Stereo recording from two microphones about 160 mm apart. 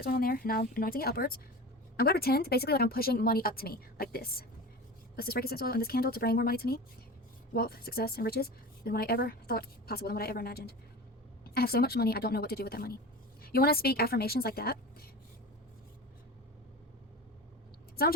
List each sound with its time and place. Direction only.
0.0 s a woman's voice: 65° left (ahead or behind)